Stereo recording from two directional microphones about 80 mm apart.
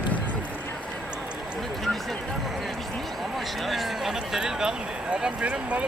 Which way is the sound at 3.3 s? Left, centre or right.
Centre.